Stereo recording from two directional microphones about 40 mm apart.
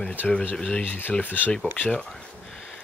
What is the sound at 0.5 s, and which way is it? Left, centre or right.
Speech, centre.